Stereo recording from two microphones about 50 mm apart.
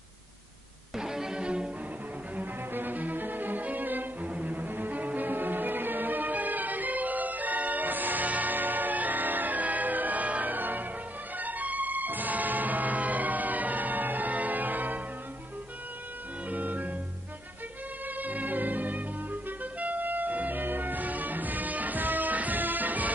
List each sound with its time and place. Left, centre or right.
0.9 s music: centre
2.7 s music: right
4.3 s cello: right
11.3 s music: right
16.4 s music: right
18.1 s music: right